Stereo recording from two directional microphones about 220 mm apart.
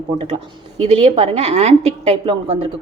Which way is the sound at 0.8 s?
25° right (ahead or behind).